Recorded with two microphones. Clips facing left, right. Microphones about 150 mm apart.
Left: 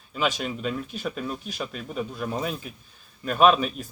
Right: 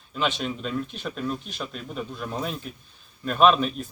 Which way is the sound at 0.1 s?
5° left (ahead or behind).